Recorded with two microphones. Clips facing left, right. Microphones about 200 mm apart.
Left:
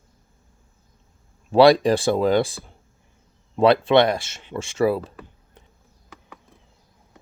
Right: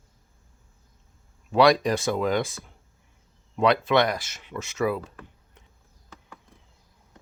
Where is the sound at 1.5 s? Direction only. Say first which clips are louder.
Left 5 dB; 30° left (ahead or behind).